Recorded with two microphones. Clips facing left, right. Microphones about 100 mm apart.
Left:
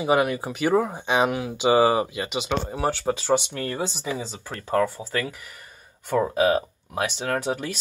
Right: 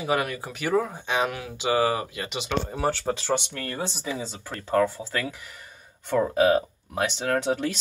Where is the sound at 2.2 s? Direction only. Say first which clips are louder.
Left 2 dB; 5° left (ahead or behind).